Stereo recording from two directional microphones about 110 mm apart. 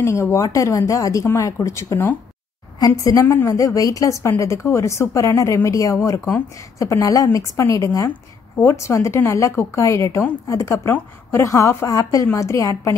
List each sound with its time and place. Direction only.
0.0 s a woman's voice: 25° left (ahead or behind)